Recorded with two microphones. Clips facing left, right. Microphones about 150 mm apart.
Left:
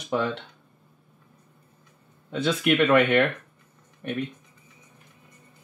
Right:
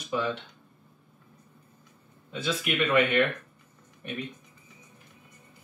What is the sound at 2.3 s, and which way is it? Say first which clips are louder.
Speech: left 7 dB; 65° left (ahead or behind).